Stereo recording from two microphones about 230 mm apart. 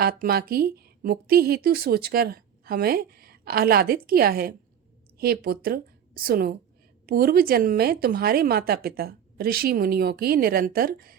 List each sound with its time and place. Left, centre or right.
0.0 s a woman's voice: right